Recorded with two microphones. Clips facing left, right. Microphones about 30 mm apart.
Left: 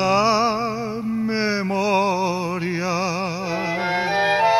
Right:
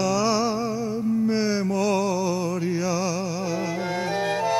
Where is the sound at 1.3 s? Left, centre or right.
Left.